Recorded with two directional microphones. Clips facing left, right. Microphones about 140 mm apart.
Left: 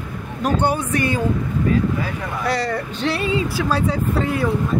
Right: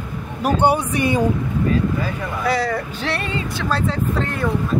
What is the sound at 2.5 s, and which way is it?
Speech, 5° right (ahead or behind).